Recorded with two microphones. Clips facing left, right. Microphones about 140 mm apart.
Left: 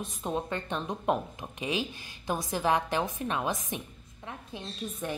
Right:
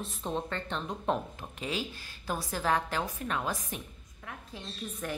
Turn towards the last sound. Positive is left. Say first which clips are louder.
# left 2 dB
turn(degrees=20)  # may be behind; listen again after turning